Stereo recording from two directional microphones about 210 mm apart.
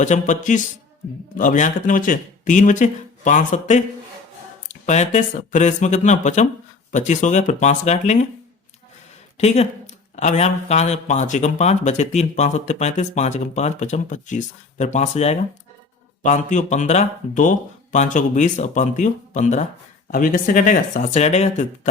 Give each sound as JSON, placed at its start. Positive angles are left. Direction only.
{"t": 0.0, "sound": "speech", "side_deg": 35}
{"t": 4.9, "sound": "speech", "side_deg": 35}
{"t": 9.4, "sound": "speech", "side_deg": 30}